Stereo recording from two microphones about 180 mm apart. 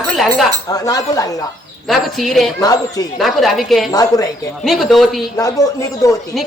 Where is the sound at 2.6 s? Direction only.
20° left (ahead or behind).